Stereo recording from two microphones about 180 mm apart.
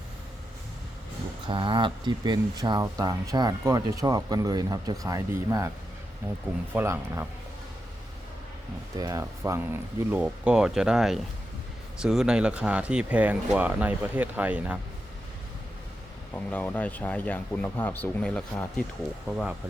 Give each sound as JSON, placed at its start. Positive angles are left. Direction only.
{"t": 1.5, "sound": "speech", "side_deg": -25}
{"t": 6.7, "sound": "speech", "side_deg": -15}
{"t": 9.0, "sound": "speech", "side_deg": -20}
{"t": 16.3, "sound": "speech", "side_deg": 10}